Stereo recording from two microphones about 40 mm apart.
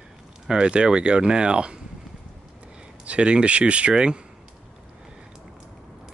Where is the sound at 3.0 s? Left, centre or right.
Right.